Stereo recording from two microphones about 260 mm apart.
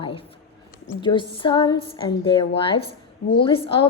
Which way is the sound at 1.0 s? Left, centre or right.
Centre.